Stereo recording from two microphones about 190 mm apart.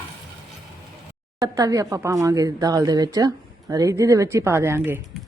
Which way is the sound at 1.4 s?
20° right (ahead or behind).